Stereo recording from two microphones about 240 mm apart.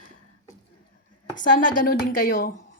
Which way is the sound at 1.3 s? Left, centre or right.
Left.